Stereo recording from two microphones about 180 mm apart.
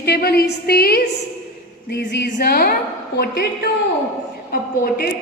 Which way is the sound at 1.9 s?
70° left (ahead or behind).